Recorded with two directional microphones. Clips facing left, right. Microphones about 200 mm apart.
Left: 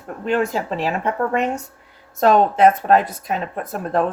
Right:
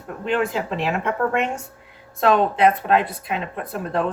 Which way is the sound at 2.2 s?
45° left (ahead or behind).